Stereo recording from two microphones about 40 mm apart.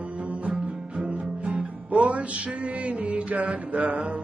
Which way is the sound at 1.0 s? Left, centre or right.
Right.